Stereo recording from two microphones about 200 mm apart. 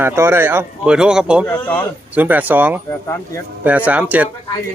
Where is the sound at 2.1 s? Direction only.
10° right (ahead or behind).